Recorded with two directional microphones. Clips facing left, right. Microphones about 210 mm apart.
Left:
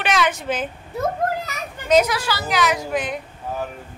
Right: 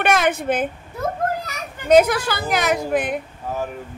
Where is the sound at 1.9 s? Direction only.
55° right (ahead or behind).